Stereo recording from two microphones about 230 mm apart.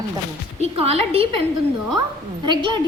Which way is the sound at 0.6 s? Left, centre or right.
Right.